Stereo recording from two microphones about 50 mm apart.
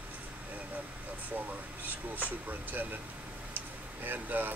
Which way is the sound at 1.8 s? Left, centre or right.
Right.